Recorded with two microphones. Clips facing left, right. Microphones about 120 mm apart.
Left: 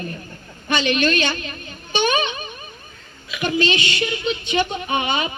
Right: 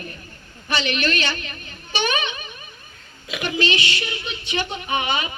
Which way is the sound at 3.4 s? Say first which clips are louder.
Left 3 dB; 25° left (ahead or behind).